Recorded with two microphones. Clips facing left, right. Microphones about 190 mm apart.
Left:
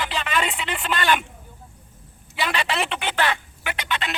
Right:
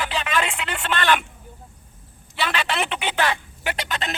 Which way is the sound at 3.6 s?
40° right (ahead or behind).